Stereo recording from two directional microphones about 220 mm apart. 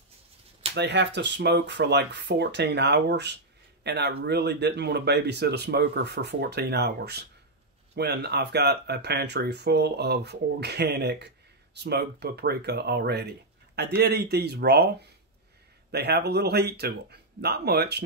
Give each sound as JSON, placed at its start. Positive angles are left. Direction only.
{"t": 0.7, "sound": "speech", "side_deg": -50}
{"t": 15.9, "sound": "speech", "side_deg": -50}